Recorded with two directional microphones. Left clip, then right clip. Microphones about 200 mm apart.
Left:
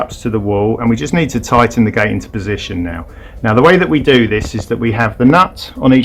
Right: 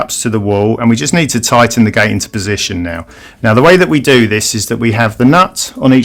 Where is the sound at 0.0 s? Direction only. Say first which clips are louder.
Right 2 dB; 65° right (ahead or behind).